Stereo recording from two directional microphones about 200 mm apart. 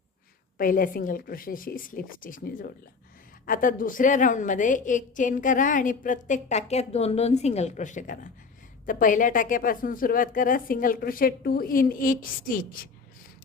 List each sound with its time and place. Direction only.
0.6 s a woman's voice: 45° left (ahead or behind)